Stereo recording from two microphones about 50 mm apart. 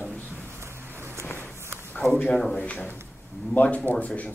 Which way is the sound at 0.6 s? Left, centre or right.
Right.